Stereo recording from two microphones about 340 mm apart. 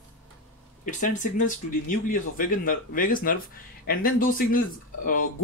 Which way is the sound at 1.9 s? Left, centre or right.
Left.